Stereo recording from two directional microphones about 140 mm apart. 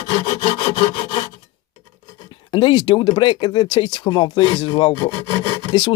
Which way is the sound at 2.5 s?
35° left (ahead or behind).